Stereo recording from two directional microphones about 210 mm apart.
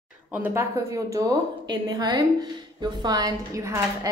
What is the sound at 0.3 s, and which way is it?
A woman's voice, 10° right (ahead or behind).